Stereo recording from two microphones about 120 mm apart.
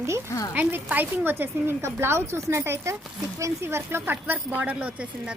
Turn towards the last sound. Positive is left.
turn(degrees=-10)  # may be behind; listen again after turning